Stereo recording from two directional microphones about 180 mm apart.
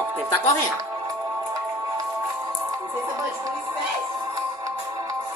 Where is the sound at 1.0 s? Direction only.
20° right (ahead or behind).